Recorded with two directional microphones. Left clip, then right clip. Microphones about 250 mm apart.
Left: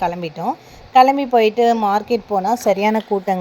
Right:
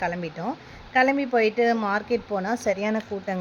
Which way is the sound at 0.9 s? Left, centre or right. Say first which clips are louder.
Left 9 dB; left.